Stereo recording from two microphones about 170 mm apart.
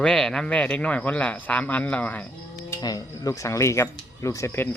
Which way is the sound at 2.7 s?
20° left (ahead or behind).